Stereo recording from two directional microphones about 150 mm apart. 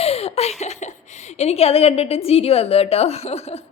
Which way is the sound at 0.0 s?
45° left (ahead or behind).